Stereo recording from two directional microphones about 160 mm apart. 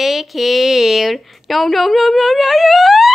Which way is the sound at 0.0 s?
Centre (ahead or behind).